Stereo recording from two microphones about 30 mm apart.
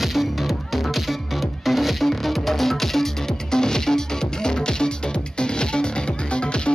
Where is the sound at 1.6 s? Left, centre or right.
Centre.